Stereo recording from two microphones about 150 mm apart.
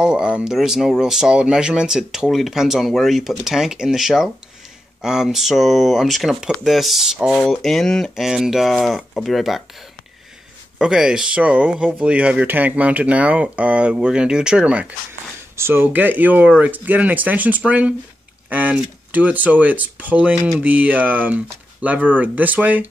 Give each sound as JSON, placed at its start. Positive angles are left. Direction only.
{"t": 0.0, "sound": "speech", "side_deg": -5}
{"t": 10.8, "sound": "speech", "side_deg": -5}